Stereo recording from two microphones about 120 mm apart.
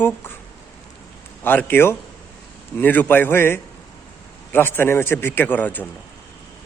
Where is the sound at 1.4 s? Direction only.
15° left (ahead or behind).